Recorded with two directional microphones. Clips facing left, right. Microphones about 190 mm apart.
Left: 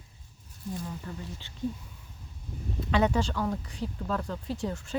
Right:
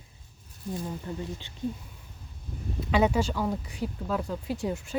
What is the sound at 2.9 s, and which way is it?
Speech, 5° right (ahead or behind).